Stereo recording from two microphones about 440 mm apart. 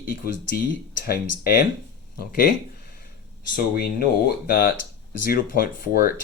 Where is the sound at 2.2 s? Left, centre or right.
Centre.